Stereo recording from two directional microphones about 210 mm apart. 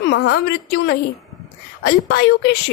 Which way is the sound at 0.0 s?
55° left (ahead or behind).